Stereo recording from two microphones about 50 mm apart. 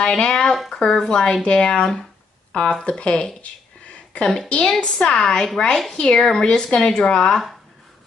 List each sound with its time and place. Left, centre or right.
0.0 s a woman's voice: centre